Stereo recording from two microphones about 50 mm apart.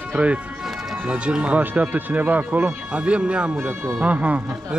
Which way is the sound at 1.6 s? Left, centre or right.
Right.